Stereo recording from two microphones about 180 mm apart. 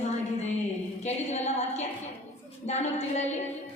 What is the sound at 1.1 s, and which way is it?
A woman's voice, 40° left (ahead or behind).